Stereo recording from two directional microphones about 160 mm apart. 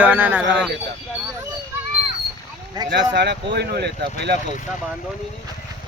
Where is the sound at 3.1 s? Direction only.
90° right.